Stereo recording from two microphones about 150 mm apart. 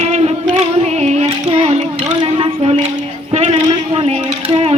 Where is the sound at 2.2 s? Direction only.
40° right (ahead or behind).